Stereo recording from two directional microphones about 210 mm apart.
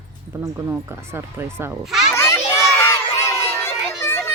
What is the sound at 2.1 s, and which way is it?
Children playing, 15° left (ahead or behind).